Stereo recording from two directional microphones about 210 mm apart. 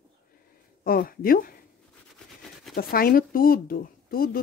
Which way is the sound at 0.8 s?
45° left (ahead or behind).